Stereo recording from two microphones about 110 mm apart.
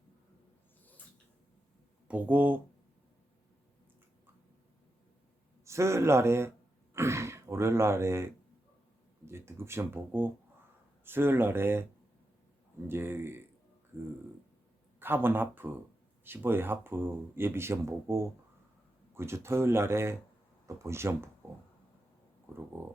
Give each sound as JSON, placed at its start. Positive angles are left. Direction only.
{"t": 2.0, "sound": "speech", "side_deg": -15}
{"t": 5.6, "sound": "speech", "side_deg": -25}
{"t": 12.9, "sound": "speech", "side_deg": -20}
{"t": 14.9, "sound": "speech", "side_deg": -20}
{"t": 22.5, "sound": "speech", "side_deg": -25}